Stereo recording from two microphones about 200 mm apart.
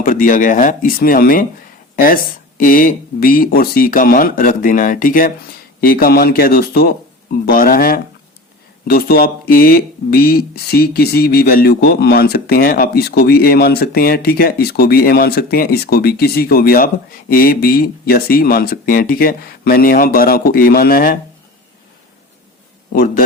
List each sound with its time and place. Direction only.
0.0 s speech: 40° left (ahead or behind)
2.6 s speech: 45° left (ahead or behind)
22.9 s a man's voice: 45° left (ahead or behind)